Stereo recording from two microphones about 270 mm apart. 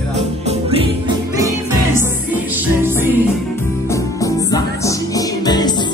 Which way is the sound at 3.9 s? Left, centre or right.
Centre.